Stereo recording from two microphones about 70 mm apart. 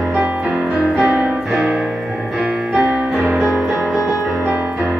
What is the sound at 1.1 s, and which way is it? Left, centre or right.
Music, centre.